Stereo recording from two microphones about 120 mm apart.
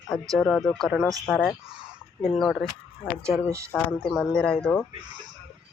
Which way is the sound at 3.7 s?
5° left (ahead or behind).